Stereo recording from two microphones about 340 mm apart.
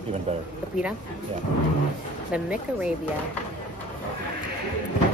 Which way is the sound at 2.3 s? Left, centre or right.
Centre.